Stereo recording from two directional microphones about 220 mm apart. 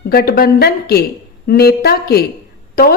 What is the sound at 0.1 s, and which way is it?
A woman's voice, 45° left (ahead or behind).